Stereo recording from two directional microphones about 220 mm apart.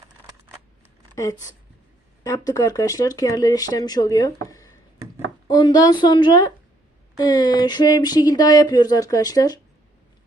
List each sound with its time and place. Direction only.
1.1 s a woman's voice: 15° left (ahead or behind)